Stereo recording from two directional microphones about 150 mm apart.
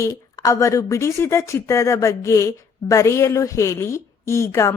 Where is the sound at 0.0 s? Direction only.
20° left (ahead or behind).